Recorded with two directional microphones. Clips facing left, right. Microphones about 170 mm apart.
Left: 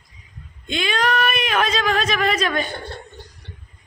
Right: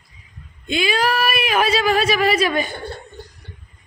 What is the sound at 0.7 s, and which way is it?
A woman's voice, 5° right (ahead or behind).